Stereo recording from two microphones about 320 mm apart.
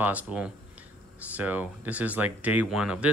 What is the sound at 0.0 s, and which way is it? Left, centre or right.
Speech, centre.